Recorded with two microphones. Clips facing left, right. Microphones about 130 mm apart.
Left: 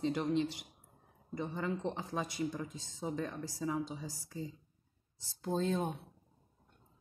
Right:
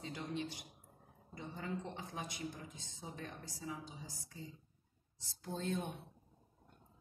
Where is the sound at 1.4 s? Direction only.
90° left.